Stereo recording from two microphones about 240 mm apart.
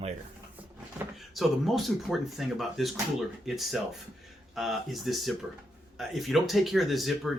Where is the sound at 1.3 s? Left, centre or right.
Centre.